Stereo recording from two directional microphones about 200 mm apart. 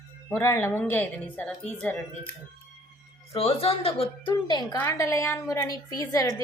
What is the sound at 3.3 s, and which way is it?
A woman's voice, 30° left (ahead or behind).